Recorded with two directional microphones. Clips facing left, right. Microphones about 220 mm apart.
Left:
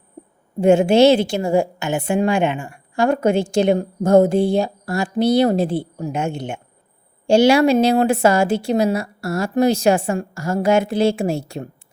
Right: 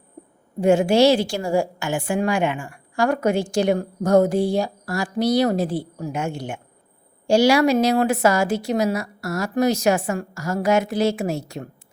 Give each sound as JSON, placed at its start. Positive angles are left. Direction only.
{"t": 0.6, "sound": "a woman's voice", "side_deg": 25}